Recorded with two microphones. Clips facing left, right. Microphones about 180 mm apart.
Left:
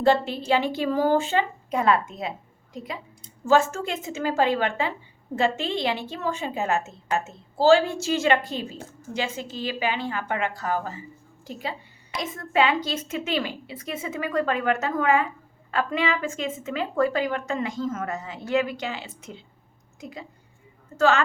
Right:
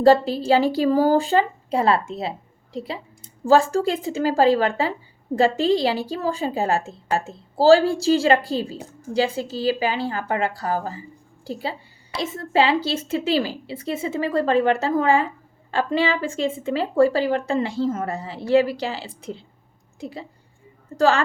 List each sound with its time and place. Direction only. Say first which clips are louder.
0.0 s a woman's voice: right 6 dB; 35° right (ahead or behind)